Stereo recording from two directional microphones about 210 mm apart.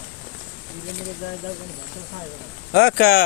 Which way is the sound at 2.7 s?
45° left (ahead or behind).